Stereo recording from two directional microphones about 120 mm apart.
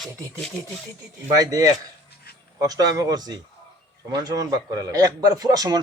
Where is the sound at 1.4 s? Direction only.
30° right (ahead or behind).